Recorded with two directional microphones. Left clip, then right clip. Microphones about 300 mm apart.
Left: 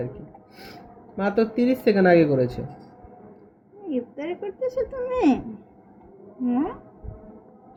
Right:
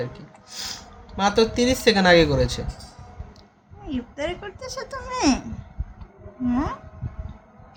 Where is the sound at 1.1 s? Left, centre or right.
Centre.